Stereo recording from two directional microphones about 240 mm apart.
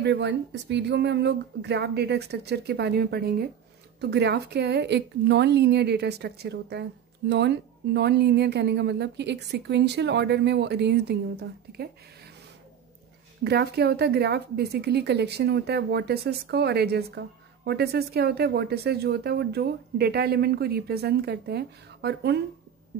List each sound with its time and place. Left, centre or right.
0.0 s a woman's voice: right
13.4 s a woman's voice: right